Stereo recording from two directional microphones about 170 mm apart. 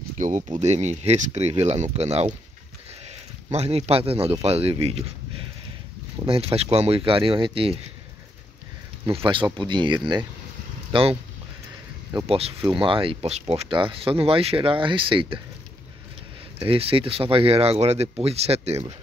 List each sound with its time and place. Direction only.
0.5 s speech: 40° right (ahead or behind)
3.5 s speech: 40° right (ahead or behind)
6.2 s speech: 35° right (ahead or behind)
9.0 s speech: 30° right (ahead or behind)
12.3 s speech: 35° right (ahead or behind)
16.5 s speech: 30° right (ahead or behind)